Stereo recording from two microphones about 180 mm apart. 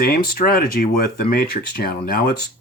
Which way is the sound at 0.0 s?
55° left (ahead or behind).